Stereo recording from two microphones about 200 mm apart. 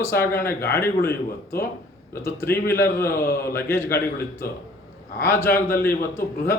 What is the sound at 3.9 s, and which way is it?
Speech, 50° left (ahead or behind).